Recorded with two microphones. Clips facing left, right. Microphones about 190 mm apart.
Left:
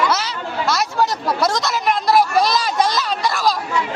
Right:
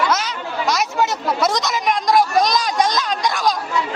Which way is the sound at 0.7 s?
Centre (ahead or behind).